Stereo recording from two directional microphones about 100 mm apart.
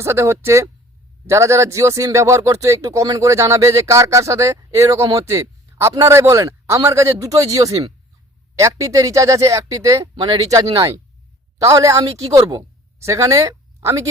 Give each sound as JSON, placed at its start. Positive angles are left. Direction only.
{"t": 0.0, "sound": "a man's voice", "side_deg": -30}